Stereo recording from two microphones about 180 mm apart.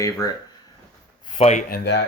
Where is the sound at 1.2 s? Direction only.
35° left (ahead or behind).